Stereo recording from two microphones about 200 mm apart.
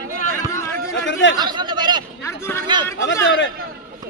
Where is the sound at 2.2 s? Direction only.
15° left (ahead or behind).